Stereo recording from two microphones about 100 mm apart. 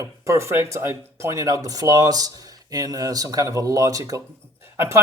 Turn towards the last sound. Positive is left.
turn(degrees=-25)  # may be behind; listen again after turning